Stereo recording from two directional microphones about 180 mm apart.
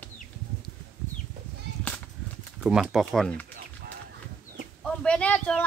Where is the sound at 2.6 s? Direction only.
Centre (ahead or behind).